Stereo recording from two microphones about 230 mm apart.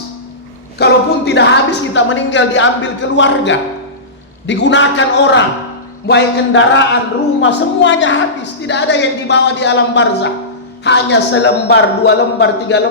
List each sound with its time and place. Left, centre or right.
0.8 s a woman's voice: left